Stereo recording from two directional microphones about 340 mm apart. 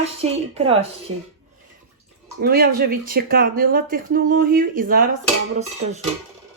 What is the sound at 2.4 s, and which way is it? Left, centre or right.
Speech, right.